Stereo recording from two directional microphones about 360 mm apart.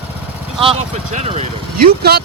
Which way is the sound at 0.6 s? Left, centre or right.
Centre.